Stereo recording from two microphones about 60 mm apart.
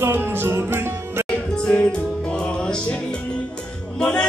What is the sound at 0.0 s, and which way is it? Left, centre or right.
Music, right.